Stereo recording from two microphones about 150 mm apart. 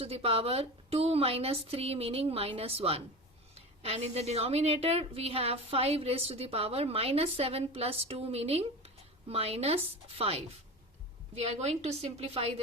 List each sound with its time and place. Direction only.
0.0 s a woman's voice: 40° right (ahead or behind)